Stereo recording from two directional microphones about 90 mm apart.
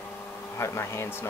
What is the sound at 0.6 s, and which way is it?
Speech, 30° left (ahead or behind).